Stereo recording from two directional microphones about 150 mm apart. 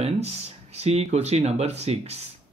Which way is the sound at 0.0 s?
45° right (ahead or behind).